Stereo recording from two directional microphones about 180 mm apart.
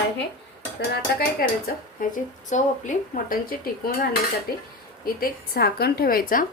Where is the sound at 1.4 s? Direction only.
50° left (ahead or behind).